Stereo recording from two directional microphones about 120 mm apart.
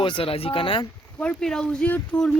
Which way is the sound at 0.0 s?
45° left (ahead or behind).